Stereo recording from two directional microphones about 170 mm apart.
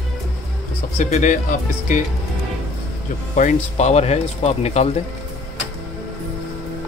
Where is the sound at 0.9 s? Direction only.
50° left (ahead or behind).